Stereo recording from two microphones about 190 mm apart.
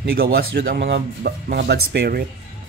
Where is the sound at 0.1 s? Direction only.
55° right (ahead or behind).